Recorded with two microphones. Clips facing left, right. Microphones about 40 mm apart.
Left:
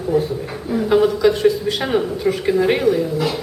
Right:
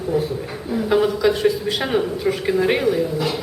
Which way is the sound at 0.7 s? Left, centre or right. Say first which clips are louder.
Left 3 dB; centre.